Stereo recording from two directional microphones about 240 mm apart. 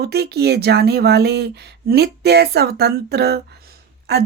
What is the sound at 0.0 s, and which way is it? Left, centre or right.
Speech, right.